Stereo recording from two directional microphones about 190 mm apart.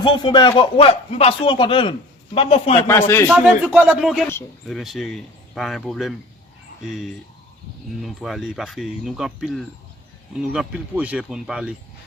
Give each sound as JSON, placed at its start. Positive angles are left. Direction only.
{"t": 0.0, "sound": "speech", "side_deg": 25}
{"t": 2.7, "sound": "speech", "side_deg": 15}
{"t": 3.2, "sound": "speech", "side_deg": 0}